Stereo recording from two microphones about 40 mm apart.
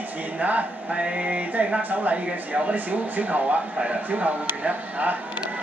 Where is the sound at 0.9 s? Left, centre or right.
Right.